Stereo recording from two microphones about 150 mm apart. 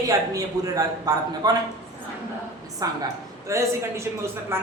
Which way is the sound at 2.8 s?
20° right (ahead or behind).